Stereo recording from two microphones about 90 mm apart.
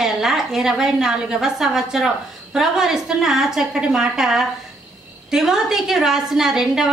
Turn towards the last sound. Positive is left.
turn(degrees=-5)  # may be behind; listen again after turning